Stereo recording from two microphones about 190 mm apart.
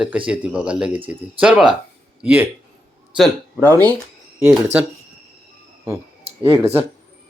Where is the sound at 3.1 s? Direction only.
5° left (ahead or behind).